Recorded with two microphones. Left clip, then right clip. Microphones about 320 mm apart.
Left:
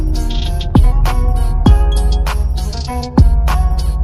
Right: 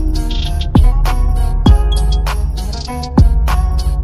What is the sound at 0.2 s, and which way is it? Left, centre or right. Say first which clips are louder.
Music: right 1 dB; centre.